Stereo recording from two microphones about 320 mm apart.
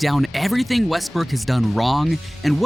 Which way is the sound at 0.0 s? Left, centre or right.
Centre.